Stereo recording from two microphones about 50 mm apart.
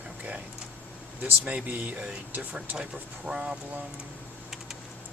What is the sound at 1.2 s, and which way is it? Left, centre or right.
Speech, right.